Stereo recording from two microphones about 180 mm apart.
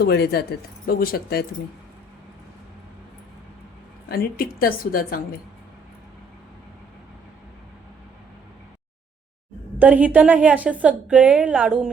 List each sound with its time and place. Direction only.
0.0 s a woman's voice: 65° left (ahead or behind)
4.1 s a woman's voice: 55° left (ahead or behind)
9.7 s a woman's voice: 10° right (ahead or behind)